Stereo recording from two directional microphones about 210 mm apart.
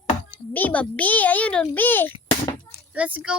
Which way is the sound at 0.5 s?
5° left (ahead or behind).